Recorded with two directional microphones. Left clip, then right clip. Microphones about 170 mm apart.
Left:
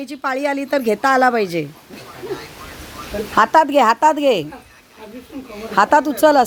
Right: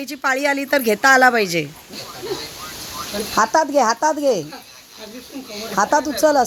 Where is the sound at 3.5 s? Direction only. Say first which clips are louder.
Left 4 dB; 35° left (ahead or behind).